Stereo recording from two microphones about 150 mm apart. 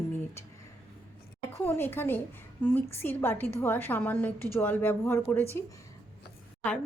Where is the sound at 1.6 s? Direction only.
15° left (ahead or behind).